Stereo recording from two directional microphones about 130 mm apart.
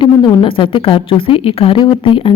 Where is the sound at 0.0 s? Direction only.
40° left (ahead or behind).